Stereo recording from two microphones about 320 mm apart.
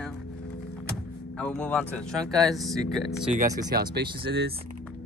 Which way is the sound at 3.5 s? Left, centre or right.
Centre.